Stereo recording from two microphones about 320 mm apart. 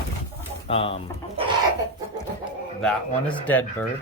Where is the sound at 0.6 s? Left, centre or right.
Centre.